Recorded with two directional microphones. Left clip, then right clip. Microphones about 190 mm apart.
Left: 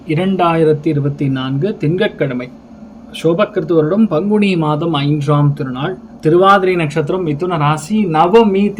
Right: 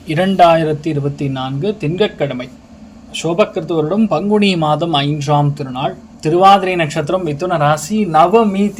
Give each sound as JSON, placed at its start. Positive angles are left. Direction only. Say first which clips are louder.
{"t": 0.1, "sound": "speech", "louder": "right 4 dB", "side_deg": -45}